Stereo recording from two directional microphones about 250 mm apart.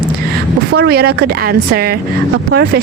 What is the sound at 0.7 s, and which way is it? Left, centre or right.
Speech, right.